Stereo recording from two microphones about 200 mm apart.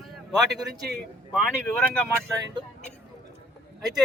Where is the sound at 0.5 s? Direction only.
50° right (ahead or behind).